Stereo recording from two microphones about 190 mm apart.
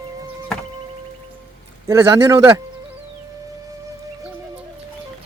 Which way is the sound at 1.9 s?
15° right (ahead or behind).